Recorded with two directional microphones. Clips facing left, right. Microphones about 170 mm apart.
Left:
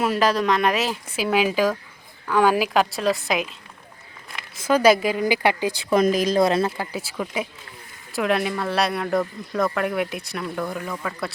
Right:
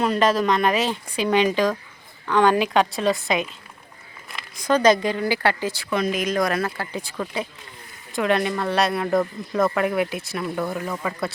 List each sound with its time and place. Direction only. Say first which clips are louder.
0.0 s speech: right 1 dB; 5° left (ahead or behind)
4.5 s a woman's voice: left 1 dB; 5° left (ahead or behind)
5.9 s speech: left 5 dB; 40° left (ahead or behind)
6.7 s a woman's voice: left 1 dB; 5° left (ahead or behind)